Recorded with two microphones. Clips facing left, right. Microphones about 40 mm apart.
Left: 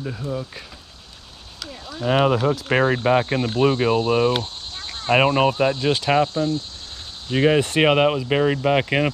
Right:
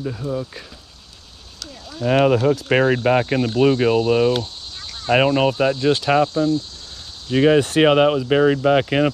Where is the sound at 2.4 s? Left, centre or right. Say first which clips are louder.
Right 2 dB; centre.